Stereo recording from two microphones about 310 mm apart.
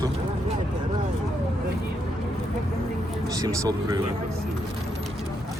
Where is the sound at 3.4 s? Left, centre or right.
Centre.